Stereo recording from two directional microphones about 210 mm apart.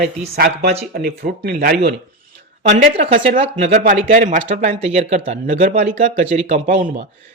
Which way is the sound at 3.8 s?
35° right (ahead or behind).